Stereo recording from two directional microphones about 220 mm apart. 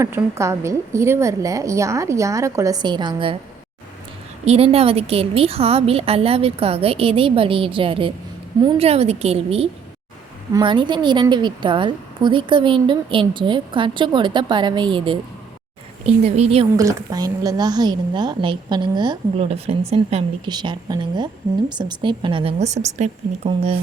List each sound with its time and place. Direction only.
0.0 s a woman's voice: 10° right (ahead or behind)
4.4 s a woman's voice: 25° right (ahead or behind)
16.7 s a woman's voice: 15° right (ahead or behind)